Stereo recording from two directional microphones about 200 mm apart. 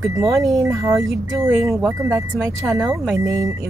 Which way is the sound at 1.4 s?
15° right (ahead or behind).